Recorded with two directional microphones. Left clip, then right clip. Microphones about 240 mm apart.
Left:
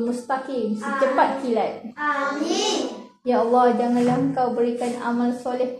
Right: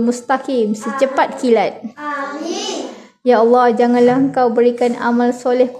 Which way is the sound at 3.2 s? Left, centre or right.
Right.